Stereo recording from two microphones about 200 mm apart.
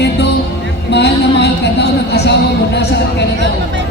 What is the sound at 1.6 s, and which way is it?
Speech, 55° left (ahead or behind).